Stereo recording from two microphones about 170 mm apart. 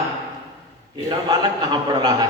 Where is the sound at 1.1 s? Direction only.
25° right (ahead or behind).